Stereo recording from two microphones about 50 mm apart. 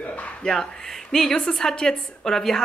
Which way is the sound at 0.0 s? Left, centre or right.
Left.